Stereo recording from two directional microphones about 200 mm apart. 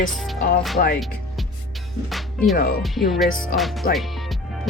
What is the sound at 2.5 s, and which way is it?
Speech, 45° left (ahead or behind).